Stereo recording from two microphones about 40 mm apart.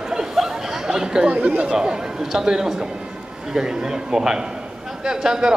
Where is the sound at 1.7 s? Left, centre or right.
Centre.